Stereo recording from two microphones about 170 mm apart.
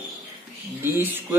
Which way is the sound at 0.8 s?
10° right (ahead or behind).